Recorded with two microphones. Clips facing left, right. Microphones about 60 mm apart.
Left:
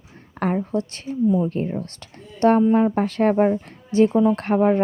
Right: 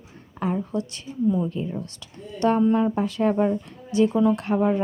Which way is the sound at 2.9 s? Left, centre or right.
Left.